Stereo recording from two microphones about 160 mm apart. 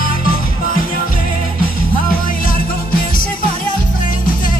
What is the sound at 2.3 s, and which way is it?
Music, 60° left (ahead or behind).